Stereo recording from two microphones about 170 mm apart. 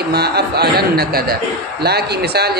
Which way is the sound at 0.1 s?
70° right (ahead or behind).